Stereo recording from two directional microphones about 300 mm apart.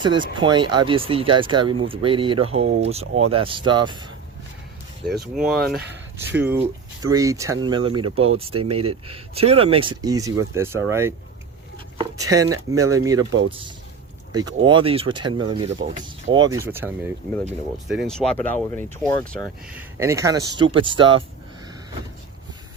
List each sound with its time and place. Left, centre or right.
0.0 s speech: centre
5.1 s speech: centre
14.3 s speech: centre
20.0 s speech: centre